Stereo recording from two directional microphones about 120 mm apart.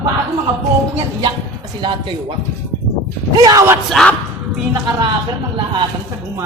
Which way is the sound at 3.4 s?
30° right (ahead or behind).